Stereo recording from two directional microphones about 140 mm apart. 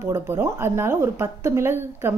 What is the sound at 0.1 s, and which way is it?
A woman's voice, 15° right (ahead or behind).